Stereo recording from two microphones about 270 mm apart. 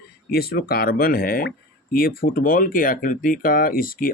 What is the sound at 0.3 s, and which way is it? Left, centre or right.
Speech, left.